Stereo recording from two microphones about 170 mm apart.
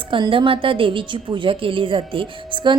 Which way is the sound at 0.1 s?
30° right (ahead or behind).